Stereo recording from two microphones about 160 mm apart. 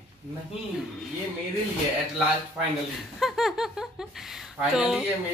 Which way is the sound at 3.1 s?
Centre (ahead or behind).